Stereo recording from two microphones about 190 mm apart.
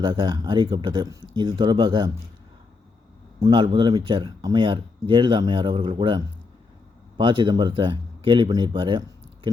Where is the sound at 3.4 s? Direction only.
25° right (ahead or behind).